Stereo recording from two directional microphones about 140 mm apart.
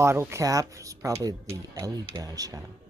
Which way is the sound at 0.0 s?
20° right (ahead or behind).